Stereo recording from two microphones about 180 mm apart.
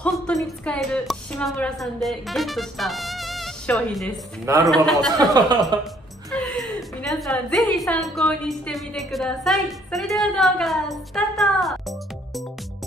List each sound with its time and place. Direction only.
0.0 s a woman's voice: centre (ahead or behind)
5.1 s speech: 20° right (ahead or behind)
6.3 s music: 5° left (ahead or behind)
7.0 s a woman's voice: centre (ahead or behind)